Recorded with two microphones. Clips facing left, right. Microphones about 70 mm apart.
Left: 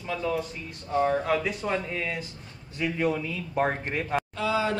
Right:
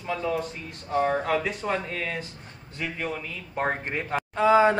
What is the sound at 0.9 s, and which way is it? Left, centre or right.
Speech, centre.